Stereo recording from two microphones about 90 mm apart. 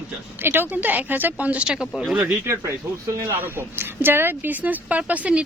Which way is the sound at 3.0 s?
40° right (ahead or behind).